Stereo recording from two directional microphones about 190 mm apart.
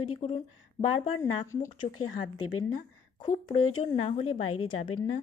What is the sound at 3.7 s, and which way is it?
Speech, 30° left (ahead or behind).